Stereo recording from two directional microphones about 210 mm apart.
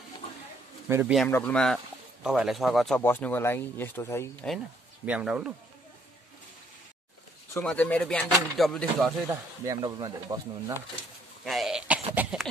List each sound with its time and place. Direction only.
0.8 s speech: 10° right (ahead or behind)
1.1 s speech: 5° left (ahead or behind)
5.0 s speech: 5° right (ahead or behind)
7.6 s speech: 5° left (ahead or behind)
9.3 s speech: 15° right (ahead or behind)
11.4 s throat clearing: centre (ahead or behind)
12.1 s a sound: 5° right (ahead or behind)